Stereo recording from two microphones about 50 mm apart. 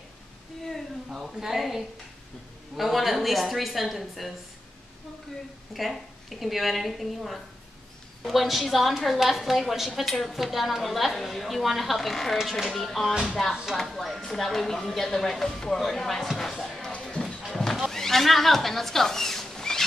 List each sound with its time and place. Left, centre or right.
1.1 s a woman's voice: centre
5.7 s a woman's voice: centre
12.7 s a woman's voice: centre
16.9 s music: centre
17.5 s a sound: centre
17.8 s rodents: centre